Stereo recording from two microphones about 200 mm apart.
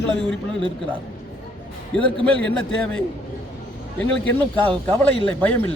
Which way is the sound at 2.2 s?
5° left (ahead or behind).